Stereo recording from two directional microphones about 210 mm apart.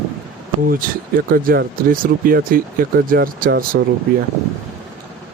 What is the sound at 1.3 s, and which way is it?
Speech, 45° right (ahead or behind).